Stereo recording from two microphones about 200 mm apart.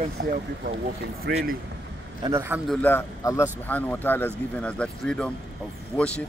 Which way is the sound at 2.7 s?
10° left (ahead or behind).